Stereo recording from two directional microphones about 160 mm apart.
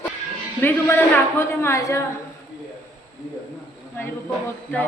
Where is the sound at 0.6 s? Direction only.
15° left (ahead or behind).